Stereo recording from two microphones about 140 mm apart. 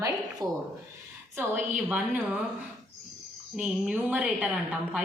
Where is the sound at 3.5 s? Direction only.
5° right (ahead or behind).